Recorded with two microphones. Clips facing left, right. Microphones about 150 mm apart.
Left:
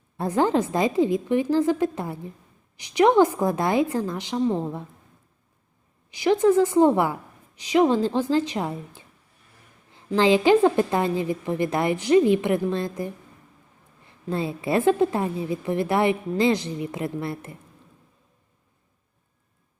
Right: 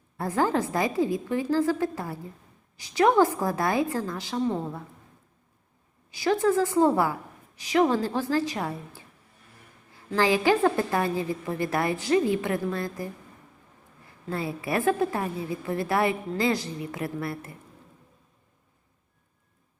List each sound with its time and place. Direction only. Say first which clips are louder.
0.2 s a woman's voice: left 4 dB; 20° left (ahead or behind)
6.1 s a woman's voice: left 4 dB; 20° left (ahead or behind)